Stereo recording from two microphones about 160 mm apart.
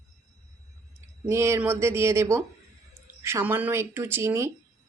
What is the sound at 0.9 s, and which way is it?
Speech, 15° right (ahead or behind).